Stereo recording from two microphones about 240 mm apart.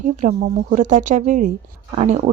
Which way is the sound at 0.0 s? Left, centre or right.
Right.